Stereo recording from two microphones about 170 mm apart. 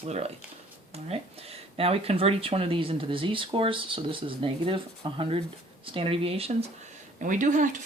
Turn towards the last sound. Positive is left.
turn(degrees=-50)  # may be behind; listen again after turning